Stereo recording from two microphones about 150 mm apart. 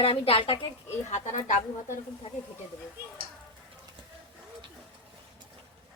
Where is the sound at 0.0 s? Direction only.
40° left (ahead or behind).